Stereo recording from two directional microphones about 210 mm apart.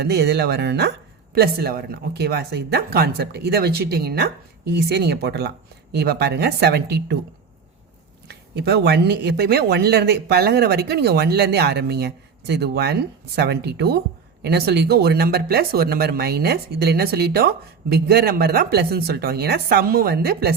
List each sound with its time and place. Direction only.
0.0 s speech: 50° right (ahead or behind)
8.3 s speech: 50° right (ahead or behind)